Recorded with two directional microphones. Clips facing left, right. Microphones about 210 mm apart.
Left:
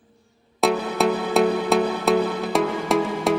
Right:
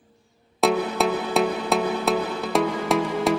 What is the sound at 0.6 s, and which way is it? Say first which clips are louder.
Music: left 1 dB; centre (ahead or behind).